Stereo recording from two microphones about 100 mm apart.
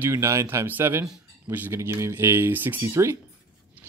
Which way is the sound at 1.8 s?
30° right (ahead or behind).